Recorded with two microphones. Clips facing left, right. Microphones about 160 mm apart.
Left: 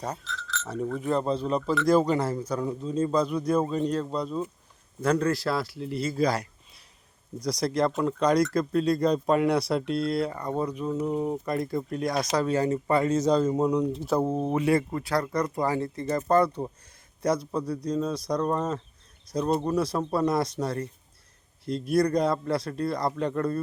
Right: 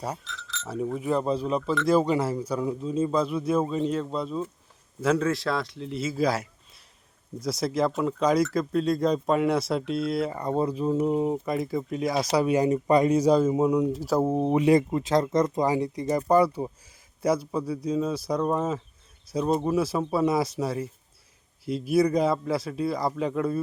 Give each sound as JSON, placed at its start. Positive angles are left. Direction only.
{"t": 0.0, "sound": "speech", "side_deg": -10}
{"t": 10.3, "sound": "speech", "side_deg": -25}
{"t": 11.0, "sound": "speech", "side_deg": -15}
{"t": 11.4, "sound": "speech", "side_deg": 0}
{"t": 14.3, "sound": "speech", "side_deg": -15}